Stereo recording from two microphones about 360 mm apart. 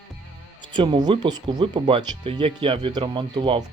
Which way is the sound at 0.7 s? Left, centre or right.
Centre.